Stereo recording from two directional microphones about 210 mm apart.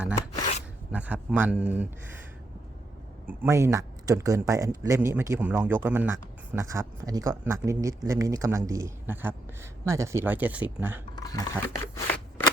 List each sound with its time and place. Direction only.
0.9 s speech: 5° right (ahead or behind)
3.2 s speech: 15° right (ahead or behind)
11.1 s speech: 15° left (ahead or behind)